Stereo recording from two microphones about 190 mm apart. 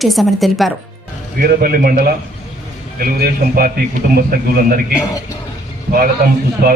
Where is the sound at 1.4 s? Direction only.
50° right (ahead or behind).